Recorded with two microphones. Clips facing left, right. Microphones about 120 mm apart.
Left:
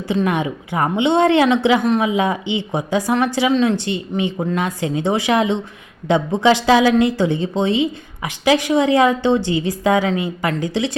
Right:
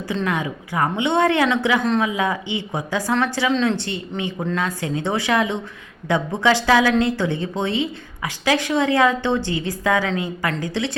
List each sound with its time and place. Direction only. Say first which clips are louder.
0.1 s a woman's voice: left 5 dB; 20° left (ahead or behind)